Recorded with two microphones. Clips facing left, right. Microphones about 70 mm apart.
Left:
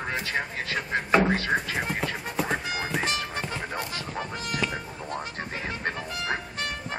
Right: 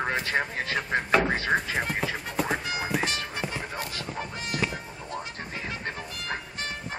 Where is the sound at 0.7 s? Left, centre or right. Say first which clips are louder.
Left 1 dB; centre.